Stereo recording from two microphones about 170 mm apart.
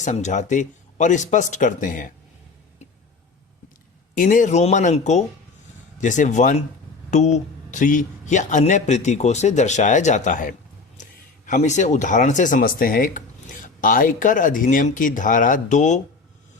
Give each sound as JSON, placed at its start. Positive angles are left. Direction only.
{"t": 0.0, "sound": "speech", "side_deg": 45}
{"t": 4.2, "sound": "speech", "side_deg": 50}